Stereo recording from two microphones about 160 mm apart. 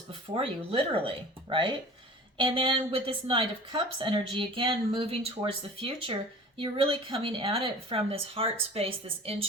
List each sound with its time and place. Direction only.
0.1 s speech: 35° right (ahead or behind)